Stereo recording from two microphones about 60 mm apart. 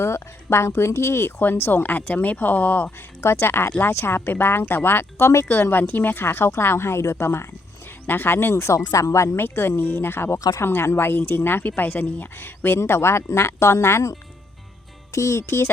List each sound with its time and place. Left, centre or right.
0.0 s speech: left
3.2 s a woman's voice: left
8.8 s speech: left
9.4 s a woman's voice: left
15.1 s a woman's voice: left